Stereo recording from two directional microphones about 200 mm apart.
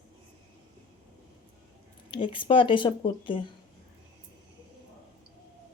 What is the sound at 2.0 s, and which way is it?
Speech, 25° left (ahead or behind).